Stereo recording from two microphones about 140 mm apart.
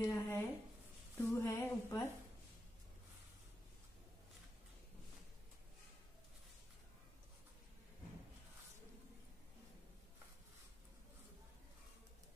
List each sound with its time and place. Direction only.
0.0 s speech: 15° left (ahead or behind)